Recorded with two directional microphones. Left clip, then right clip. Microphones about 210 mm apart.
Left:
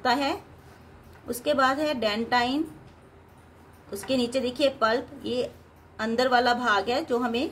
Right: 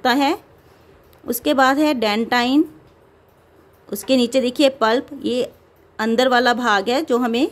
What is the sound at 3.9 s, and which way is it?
A woman's voice, 50° right (ahead or behind).